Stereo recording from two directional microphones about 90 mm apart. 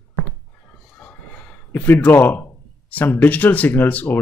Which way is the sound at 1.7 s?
25° left (ahead or behind).